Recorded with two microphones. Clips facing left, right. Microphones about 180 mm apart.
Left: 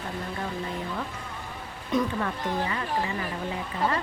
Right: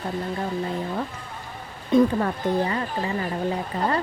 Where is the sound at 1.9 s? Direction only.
35° right (ahead or behind).